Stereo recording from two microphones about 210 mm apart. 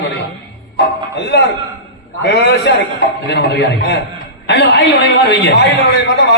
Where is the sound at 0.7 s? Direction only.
55° left (ahead or behind).